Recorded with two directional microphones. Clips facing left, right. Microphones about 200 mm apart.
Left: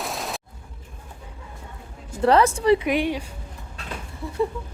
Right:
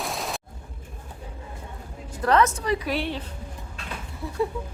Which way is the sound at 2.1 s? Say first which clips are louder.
Left 3 dB; 30° left (ahead or behind).